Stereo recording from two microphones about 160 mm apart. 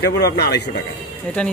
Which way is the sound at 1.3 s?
5° left (ahead or behind).